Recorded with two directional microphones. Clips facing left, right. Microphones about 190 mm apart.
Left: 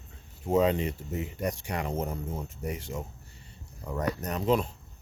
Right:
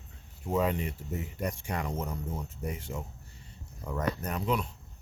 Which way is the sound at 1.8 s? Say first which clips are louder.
Left 4 dB; 25° left (ahead or behind).